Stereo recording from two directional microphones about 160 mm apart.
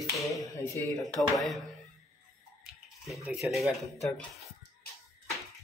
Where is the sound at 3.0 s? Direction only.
5° right (ahead or behind).